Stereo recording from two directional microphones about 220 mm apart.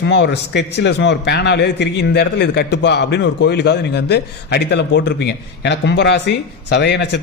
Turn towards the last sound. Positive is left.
turn(degrees=50)  # may be behind; listen again after turning